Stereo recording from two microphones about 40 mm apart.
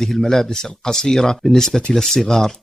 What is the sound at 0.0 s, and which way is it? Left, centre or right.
Speech, centre.